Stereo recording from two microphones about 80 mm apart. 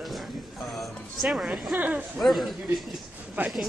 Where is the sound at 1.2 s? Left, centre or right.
Centre.